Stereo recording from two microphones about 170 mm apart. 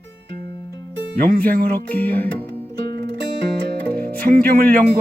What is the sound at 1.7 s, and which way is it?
Speech, 10° left (ahead or behind).